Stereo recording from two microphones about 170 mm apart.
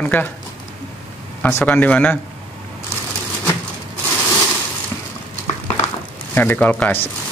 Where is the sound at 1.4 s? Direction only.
10° left (ahead or behind).